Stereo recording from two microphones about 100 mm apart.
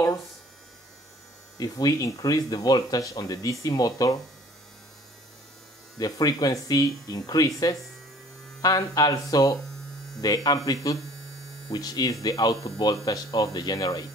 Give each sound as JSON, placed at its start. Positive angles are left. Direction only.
{"t": 1.6, "sound": "speech", "side_deg": 40}
{"t": 5.9, "sound": "speech", "side_deg": 40}